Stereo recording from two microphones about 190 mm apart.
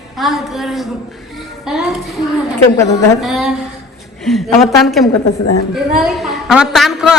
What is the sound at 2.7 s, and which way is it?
Speech, 20° left (ahead or behind).